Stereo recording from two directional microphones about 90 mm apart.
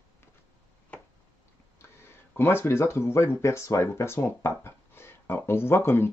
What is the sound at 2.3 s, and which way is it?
Speech, 25° left (ahead or behind).